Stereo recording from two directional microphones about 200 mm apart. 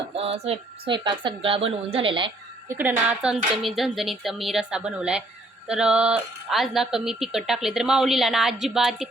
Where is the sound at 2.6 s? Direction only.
10° right (ahead or behind).